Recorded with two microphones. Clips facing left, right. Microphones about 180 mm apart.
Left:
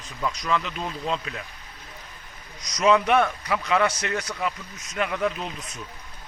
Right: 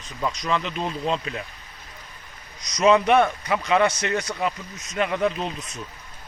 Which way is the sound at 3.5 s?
5° right (ahead or behind).